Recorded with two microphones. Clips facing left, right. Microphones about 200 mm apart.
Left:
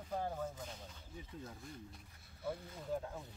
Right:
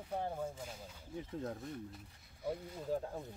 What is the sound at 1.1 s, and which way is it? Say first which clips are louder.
Speech: right 9 dB; 55° right (ahead or behind).